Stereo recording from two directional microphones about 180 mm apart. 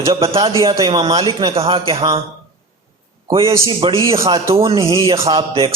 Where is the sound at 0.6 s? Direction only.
30° right (ahead or behind).